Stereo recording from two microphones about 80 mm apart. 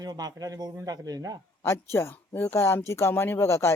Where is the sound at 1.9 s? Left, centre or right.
Left.